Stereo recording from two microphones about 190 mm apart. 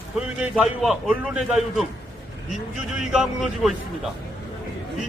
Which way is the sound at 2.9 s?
5° right (ahead or behind).